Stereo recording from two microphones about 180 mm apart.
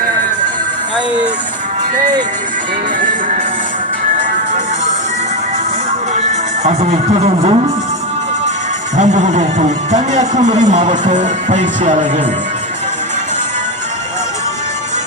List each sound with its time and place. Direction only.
6.1 s speech: 40° right (ahead or behind)
9.0 s a man's voice: 40° right (ahead or behind)